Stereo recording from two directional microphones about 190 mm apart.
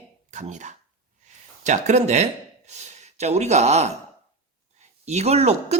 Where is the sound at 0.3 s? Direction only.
40° right (ahead or behind).